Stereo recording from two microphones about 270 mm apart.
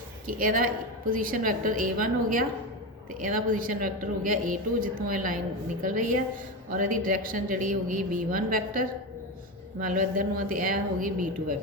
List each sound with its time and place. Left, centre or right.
0.3 s a woman's voice: right
9.8 s a woman's voice: right